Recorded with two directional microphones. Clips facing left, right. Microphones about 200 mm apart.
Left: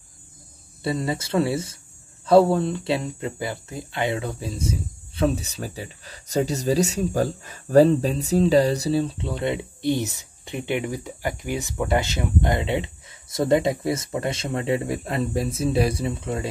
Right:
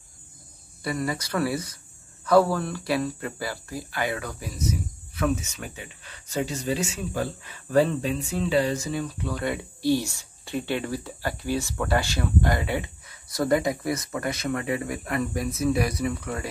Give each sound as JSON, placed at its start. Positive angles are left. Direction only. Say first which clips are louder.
{"t": 0.8, "sound": "speech", "louder": "left 3 dB", "side_deg": 25}